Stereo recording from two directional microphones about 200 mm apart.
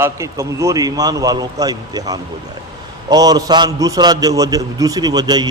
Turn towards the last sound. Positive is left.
turn(degrees=-20)  # may be behind; listen again after turning